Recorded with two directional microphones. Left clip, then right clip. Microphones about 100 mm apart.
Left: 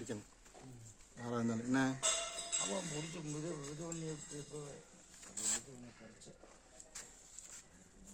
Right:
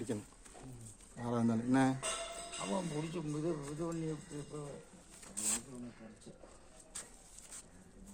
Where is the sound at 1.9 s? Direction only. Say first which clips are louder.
Left 2 dB; 15° left (ahead or behind).